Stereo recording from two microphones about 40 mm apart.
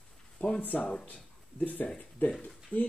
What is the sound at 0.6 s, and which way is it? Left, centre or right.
Speech, left.